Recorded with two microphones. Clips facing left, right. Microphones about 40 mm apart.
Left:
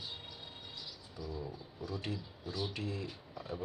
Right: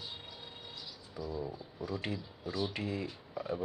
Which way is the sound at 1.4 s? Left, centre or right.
Centre.